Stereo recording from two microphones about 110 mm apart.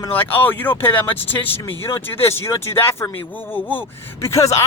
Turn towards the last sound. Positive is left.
turn(degrees=25)  # may be behind; listen again after turning